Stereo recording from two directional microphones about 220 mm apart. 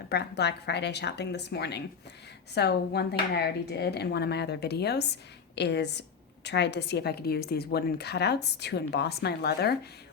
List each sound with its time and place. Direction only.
0.1 s a woman's voice: 50° left (ahead or behind)